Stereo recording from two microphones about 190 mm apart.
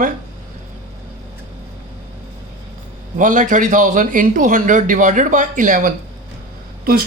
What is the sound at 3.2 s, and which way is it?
A man's voice, 40° right (ahead or behind).